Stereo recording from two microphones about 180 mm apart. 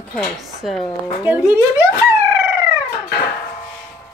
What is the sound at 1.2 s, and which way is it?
Speech, 15° right (ahead or behind).